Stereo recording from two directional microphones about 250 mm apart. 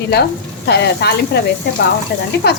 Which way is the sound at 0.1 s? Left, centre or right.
Left.